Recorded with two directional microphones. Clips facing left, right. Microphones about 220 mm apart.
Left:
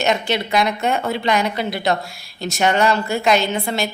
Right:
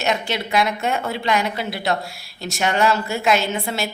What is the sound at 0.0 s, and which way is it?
A woman's voice, centre (ahead or behind).